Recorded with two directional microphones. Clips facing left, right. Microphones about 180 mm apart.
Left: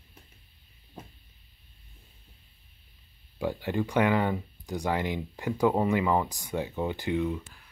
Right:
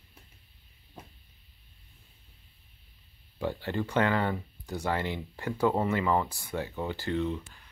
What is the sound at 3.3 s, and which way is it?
Speech, 15° left (ahead or behind).